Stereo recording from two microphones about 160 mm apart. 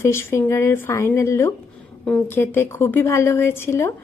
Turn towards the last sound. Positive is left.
turn(degrees=15)  # may be behind; listen again after turning